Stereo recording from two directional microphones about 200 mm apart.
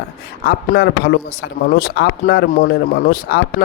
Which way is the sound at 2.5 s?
40° left (ahead or behind).